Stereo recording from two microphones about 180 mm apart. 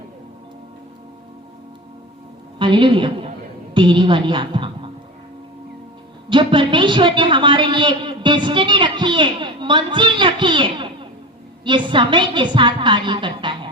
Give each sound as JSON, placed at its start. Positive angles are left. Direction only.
{"t": 2.6, "sound": "a man's voice", "side_deg": -25}
{"t": 6.2, "sound": "a man's voice", "side_deg": -25}